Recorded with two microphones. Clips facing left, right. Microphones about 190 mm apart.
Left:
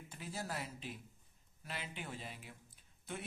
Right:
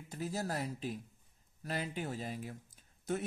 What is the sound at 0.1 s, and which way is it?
A man's voice, 40° right (ahead or behind).